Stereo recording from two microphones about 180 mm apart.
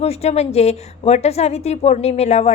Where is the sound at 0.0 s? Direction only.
35° left (ahead or behind).